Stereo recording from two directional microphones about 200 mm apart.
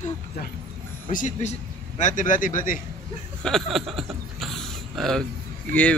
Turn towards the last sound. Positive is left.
turn(degrees=5)  # may be behind; listen again after turning